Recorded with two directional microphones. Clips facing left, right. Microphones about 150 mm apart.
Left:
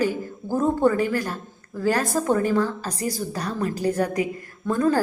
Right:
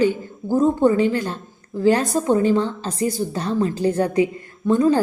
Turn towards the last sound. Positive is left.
turn(degrees=-20)  # may be behind; listen again after turning